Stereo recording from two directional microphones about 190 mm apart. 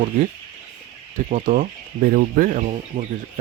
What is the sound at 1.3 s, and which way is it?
Speech, 45° right (ahead or behind).